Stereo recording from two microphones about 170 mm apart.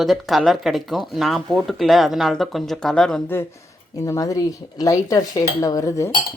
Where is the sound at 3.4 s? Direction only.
15° left (ahead or behind).